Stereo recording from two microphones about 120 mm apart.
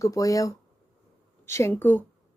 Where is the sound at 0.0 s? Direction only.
30° left (ahead or behind).